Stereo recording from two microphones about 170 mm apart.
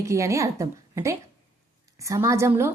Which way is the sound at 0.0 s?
15° right (ahead or behind).